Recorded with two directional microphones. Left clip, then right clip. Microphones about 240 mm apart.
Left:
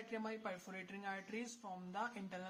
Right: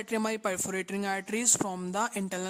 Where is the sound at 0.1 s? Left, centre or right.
Right.